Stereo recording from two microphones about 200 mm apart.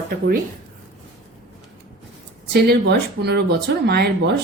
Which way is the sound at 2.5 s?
55° right (ahead or behind).